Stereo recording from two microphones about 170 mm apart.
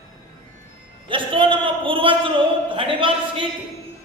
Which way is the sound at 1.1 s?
30° right (ahead or behind).